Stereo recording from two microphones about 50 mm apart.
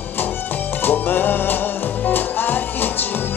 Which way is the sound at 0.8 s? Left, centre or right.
Left.